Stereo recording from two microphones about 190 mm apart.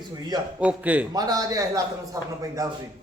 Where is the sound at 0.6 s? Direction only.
5° right (ahead or behind).